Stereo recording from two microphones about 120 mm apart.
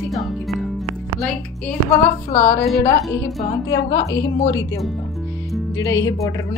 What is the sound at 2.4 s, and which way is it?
Speech, 20° left (ahead or behind).